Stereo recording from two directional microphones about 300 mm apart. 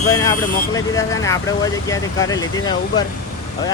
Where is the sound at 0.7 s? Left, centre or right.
Centre.